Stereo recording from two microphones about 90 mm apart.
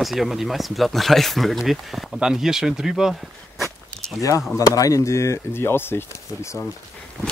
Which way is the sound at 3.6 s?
Centre (ahead or behind).